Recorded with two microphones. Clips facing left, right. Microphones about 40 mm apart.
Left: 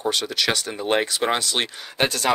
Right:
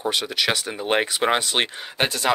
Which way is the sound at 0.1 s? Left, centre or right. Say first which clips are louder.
Right 1 dB; centre.